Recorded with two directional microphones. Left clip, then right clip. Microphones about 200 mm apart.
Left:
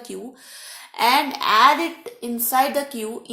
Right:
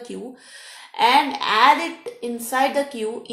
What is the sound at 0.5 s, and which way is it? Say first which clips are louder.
A woman's voice: right 1 dB; 40° left (ahead or behind).